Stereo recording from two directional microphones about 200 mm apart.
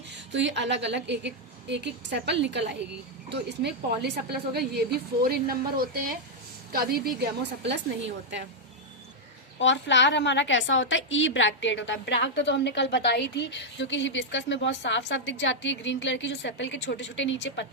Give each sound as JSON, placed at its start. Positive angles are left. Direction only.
{"t": 0.3, "sound": "a woman's voice", "side_deg": -60}
{"t": 9.6, "sound": "a woman's voice", "side_deg": 65}